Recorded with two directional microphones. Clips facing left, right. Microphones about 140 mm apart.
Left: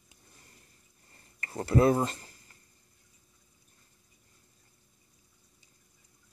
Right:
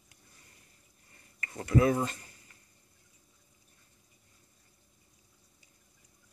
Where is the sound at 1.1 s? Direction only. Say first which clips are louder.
Left 5 dB; 35° left (ahead or behind).